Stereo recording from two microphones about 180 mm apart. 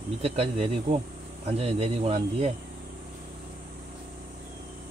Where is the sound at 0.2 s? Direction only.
35° right (ahead or behind).